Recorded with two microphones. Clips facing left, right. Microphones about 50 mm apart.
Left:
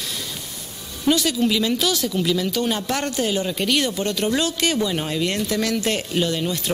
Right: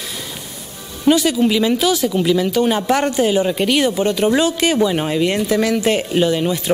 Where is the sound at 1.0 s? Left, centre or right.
Centre.